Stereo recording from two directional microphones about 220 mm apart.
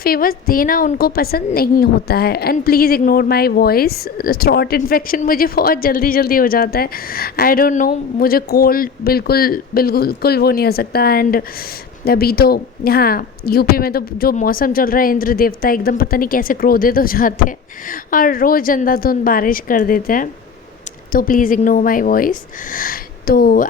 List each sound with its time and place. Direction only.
0.0 s a woman's voice: 40° left (ahead or behind)